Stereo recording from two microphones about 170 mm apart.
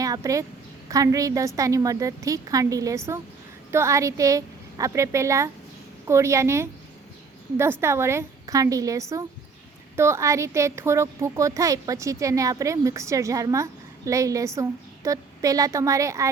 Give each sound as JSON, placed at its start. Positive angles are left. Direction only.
{"t": 0.0, "sound": "a woman's voice", "side_deg": -20}